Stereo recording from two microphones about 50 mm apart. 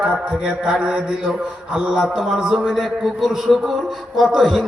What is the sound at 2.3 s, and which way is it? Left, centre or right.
Mantra, centre.